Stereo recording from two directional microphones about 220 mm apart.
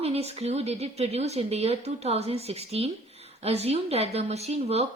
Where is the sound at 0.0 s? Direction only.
30° right (ahead or behind).